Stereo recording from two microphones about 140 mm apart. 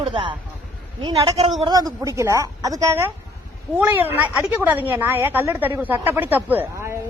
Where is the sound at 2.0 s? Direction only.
20° right (ahead or behind).